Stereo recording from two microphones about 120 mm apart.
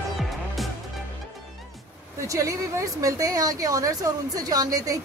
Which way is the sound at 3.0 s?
30° right (ahead or behind).